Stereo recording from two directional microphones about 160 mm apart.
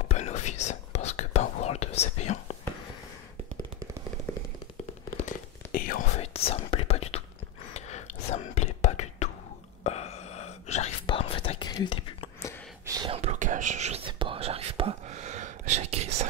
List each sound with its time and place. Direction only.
0.1 s whispering: 45° left (ahead or behind)
5.1 s whispering: 60° left (ahead or behind)
6.1 s whispering: 40° left (ahead or behind)
12.8 s whispering: 25° right (ahead or behind)
13.1 s whispering: 45° right (ahead or behind)